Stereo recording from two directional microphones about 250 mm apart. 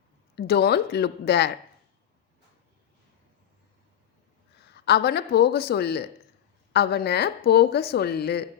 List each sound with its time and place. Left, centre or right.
0.3 s speech: left
4.7 s speech: left